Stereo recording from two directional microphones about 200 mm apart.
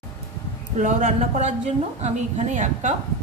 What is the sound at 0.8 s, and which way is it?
A woman's voice, 40° right (ahead or behind).